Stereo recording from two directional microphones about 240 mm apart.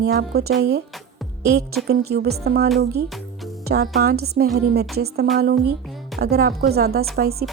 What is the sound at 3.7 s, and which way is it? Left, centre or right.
Speech, right.